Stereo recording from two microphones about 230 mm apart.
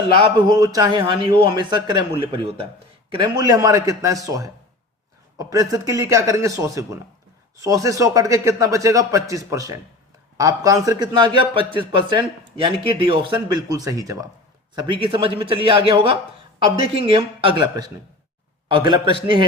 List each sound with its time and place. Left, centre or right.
0.2 s a man's voice: centre